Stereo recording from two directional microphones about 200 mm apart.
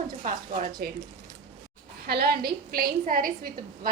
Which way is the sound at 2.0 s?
50° right (ahead or behind).